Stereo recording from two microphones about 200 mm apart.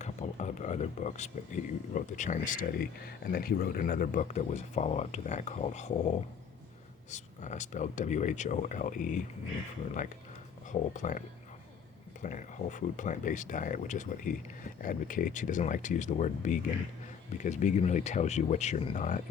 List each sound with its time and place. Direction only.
0.0 s speech: 35° left (ahead or behind)
7.1 s speech: 35° left (ahead or behind)
12.2 s speech: 40° left (ahead or behind)